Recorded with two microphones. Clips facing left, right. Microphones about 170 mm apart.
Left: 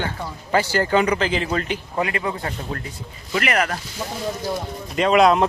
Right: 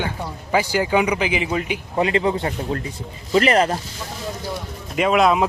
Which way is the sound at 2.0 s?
25° right (ahead or behind).